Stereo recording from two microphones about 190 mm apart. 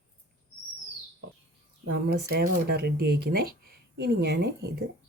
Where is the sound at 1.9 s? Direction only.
60° right (ahead or behind).